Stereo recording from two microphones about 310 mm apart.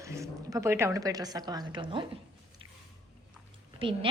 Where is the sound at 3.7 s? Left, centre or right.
Centre.